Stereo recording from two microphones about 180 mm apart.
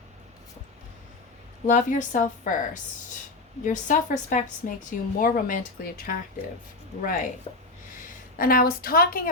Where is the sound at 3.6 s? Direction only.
45° left (ahead or behind).